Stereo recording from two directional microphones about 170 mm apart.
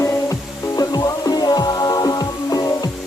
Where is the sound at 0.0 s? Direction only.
20° left (ahead or behind).